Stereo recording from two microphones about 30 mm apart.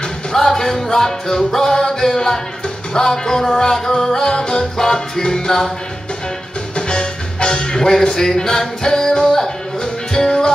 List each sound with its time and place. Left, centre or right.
0.3 s music: centre
6.9 s music: left